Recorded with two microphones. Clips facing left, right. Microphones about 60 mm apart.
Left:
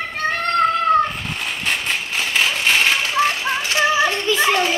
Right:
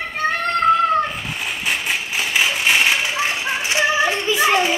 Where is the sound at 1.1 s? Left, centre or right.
Centre.